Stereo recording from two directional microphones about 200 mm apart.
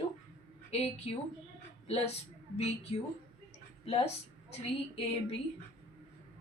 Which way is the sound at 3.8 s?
30° left (ahead or behind).